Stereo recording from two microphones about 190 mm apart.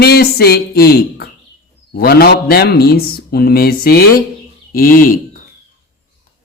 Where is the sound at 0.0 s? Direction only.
55° left (ahead or behind).